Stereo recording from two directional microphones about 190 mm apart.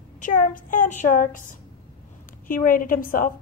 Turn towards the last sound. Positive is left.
turn(degrees=45)  # may be behind; listen again after turning